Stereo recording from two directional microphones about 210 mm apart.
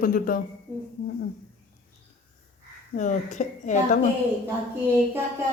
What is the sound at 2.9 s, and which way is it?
A woman's voice, 35° left (ahead or behind).